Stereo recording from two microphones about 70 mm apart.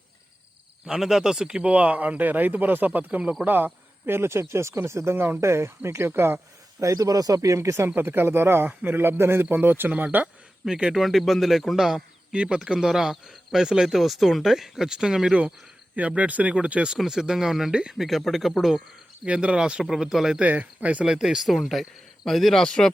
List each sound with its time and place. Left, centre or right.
0.9 s speech: centre; by 6.4 s right
6.7 s speech: right
7.9 s speech: right
10.7 s a man's voice: centre
16.0 s speech: right; by 18.8 s centre
19.2 s a man's voice: centre
20.4 s speech: right
21.1 s speech: centre